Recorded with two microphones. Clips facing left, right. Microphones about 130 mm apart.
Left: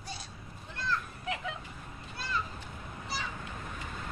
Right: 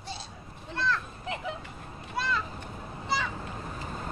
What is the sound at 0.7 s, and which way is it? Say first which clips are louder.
Children playing: right 5 dB; 75° right (ahead or behind).